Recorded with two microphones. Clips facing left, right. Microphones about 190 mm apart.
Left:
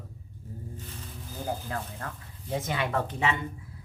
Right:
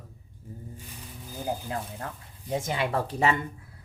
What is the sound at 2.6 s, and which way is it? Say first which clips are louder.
Speech: even; 30° right (ahead or behind).